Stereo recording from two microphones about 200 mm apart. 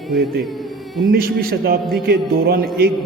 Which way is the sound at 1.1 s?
50° right (ahead or behind).